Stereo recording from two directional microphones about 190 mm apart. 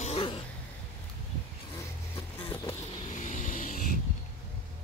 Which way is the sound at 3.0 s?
40° left (ahead or behind).